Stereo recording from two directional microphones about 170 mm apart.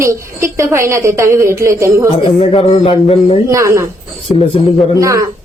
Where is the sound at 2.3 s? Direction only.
35° left (ahead or behind).